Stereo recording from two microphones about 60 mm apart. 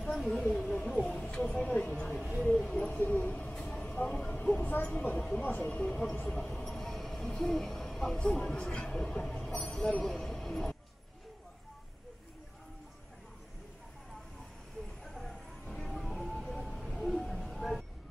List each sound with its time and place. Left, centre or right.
0.1 s a sound: centre
2.5 s owl: centre
3.8 s vehicle: left
4.8 s a woman's voice: left
5.7 s speech: centre
15.0 s music: centre
17.2 s a sound: centre